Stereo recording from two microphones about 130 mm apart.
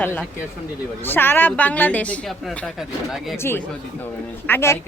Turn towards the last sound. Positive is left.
turn(degrees=20)  # may be behind; listen again after turning